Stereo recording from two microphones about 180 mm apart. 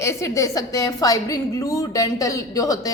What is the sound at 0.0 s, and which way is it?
A woman's voice, 15° left (ahead or behind).